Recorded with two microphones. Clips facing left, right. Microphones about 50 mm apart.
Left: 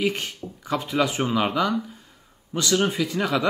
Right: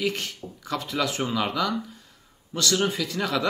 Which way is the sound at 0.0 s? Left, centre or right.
Left.